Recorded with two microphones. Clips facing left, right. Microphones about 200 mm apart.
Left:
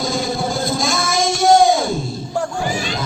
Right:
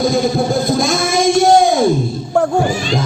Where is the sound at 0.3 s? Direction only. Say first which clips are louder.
Right 6 dB; 55° right (ahead or behind).